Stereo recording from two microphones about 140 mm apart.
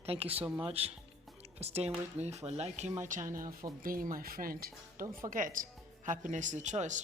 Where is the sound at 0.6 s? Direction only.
45° right (ahead or behind).